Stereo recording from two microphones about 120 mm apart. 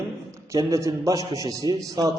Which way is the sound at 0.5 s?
25° right (ahead or behind).